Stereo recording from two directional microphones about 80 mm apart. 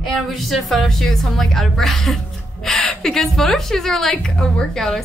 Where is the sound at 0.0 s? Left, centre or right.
Centre.